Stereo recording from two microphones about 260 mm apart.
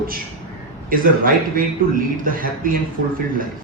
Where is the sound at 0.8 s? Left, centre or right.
Right.